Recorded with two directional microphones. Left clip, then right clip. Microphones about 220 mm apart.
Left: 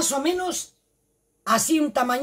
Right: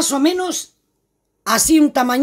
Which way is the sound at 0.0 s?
40° right (ahead or behind).